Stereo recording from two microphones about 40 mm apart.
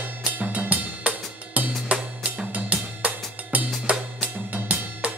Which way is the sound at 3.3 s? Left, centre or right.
Right.